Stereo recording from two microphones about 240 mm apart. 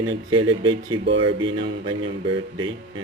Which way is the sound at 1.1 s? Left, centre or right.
Right.